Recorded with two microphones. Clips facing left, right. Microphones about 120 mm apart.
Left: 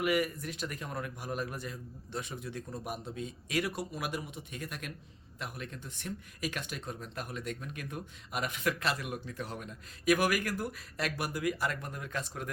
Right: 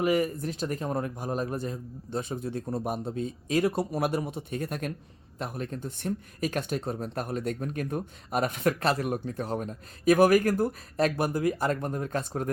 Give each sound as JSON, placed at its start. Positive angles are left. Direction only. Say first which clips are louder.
{"t": 0.0, "sound": "speech", "louder": "right 5 dB", "side_deg": -35}